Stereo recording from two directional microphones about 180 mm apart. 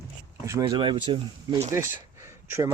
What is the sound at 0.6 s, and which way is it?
Speech, 25° right (ahead or behind).